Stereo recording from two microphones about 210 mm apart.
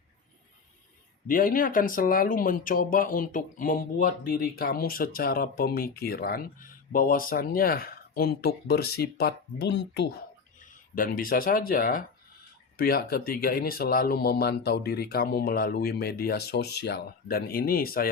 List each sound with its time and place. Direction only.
1.3 s speech: 40° left (ahead or behind)
10.7 s speech: 40° left (ahead or behind)